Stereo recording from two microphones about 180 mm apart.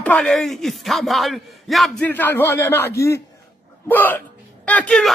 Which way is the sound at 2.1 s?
10° left (ahead or behind).